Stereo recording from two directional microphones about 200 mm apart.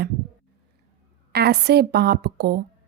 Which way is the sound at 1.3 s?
55° right (ahead or behind).